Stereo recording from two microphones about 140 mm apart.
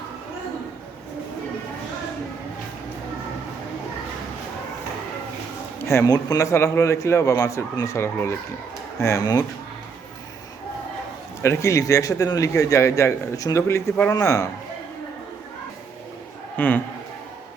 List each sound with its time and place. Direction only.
5.8 s a man's voice: 20° left (ahead or behind)
11.4 s a man's voice: 20° left (ahead or behind)
16.6 s a man's voice: 10° left (ahead or behind)